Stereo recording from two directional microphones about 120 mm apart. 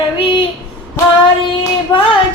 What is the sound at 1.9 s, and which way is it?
Child singing, 30° left (ahead or behind).